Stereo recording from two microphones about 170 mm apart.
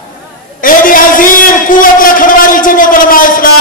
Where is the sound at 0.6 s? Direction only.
55° left (ahead or behind).